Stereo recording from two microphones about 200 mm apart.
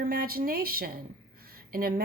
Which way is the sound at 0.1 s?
50° right (ahead or behind).